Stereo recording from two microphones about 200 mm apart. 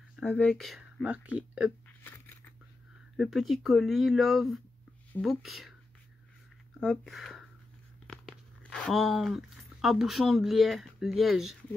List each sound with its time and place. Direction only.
0.1 s speech: 5° left (ahead or behind)
3.2 s speech: centre (ahead or behind)
6.8 s speech: centre (ahead or behind)